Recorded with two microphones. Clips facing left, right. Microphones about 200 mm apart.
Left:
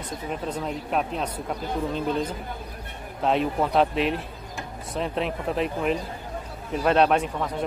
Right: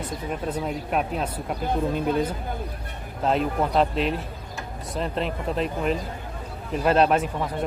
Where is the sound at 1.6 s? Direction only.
55° right (ahead or behind).